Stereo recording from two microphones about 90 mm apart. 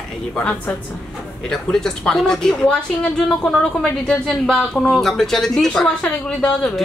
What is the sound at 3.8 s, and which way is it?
Speech, 5° left (ahead or behind).